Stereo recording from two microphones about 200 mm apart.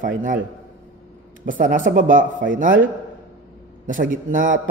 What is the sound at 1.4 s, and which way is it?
A man's voice, 40° right (ahead or behind).